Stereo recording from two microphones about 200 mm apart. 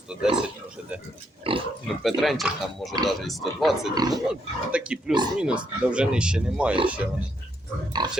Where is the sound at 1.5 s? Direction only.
25° right (ahead or behind).